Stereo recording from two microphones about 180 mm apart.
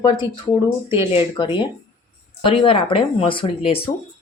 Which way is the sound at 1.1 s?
30° left (ahead or behind).